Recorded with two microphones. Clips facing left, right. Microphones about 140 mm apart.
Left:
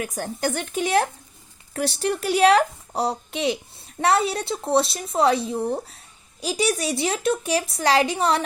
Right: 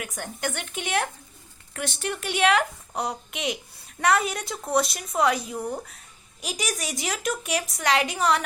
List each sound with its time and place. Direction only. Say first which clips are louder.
0.0 s a woman's voice: left 6 dB; 35° left (ahead or behind)